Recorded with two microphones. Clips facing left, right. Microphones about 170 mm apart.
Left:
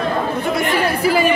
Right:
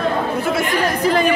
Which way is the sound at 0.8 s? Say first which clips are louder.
Even; 5° left (ahead or behind).